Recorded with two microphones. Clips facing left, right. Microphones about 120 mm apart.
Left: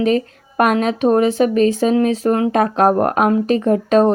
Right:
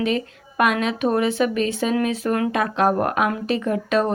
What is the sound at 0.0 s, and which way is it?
Speech, 40° left (ahead or behind).